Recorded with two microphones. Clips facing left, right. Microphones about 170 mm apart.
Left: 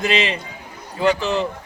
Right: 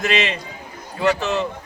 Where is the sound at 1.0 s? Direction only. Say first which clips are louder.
Left 1 dB; 35° left (ahead or behind).